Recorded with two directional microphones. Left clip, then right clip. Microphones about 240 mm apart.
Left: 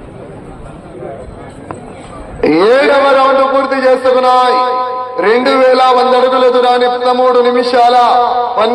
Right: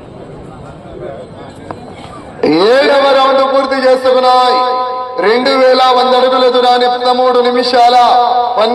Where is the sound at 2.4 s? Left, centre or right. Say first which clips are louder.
Even; right.